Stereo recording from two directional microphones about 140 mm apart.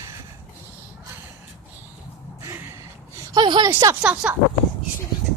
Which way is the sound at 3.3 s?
30° right (ahead or behind).